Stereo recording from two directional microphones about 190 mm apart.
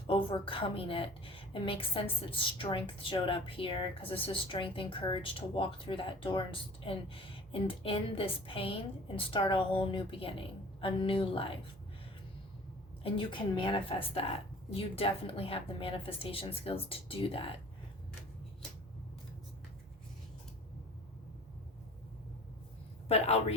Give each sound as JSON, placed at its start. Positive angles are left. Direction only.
{"t": 0.1, "sound": "a woman's voice", "side_deg": 25}
{"t": 13.0, "sound": "a woman's voice", "side_deg": 30}
{"t": 23.0, "sound": "a woman's voice", "side_deg": 35}